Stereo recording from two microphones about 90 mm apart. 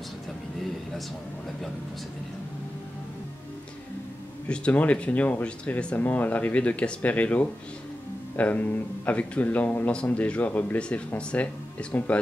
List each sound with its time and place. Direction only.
4.5 s speech: 15° left (ahead or behind)